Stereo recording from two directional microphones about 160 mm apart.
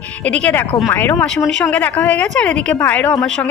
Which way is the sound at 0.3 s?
10° left (ahead or behind).